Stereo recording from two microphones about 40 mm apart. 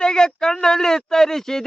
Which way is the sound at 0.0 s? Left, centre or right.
Centre.